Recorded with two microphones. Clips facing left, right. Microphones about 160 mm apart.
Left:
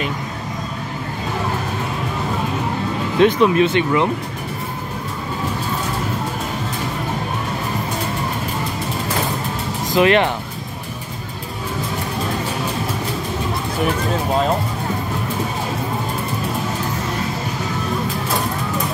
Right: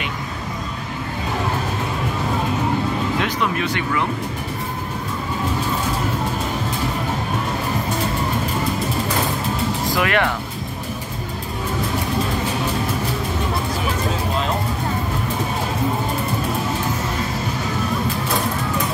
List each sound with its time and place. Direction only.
3.2 s speech: 25° left (ahead or behind)
9.8 s speech: 25° left (ahead or behind)